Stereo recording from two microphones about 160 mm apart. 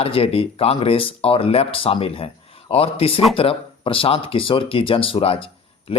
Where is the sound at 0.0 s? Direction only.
35° left (ahead or behind).